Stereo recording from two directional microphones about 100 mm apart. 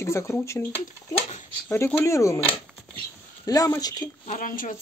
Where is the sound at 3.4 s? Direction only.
35° left (ahead or behind).